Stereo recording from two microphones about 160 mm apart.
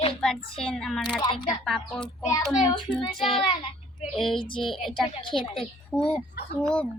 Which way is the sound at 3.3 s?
35° left (ahead or behind).